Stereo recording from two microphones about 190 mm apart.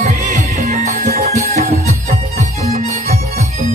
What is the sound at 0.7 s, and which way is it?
Music, 35° right (ahead or behind).